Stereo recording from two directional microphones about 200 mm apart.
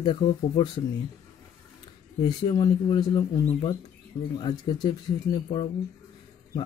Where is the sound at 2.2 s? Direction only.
20° left (ahead or behind).